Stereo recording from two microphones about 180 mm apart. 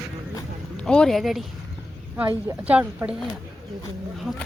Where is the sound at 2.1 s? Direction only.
15° right (ahead or behind).